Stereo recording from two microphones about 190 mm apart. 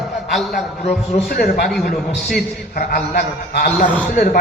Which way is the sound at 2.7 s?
50° left (ahead or behind).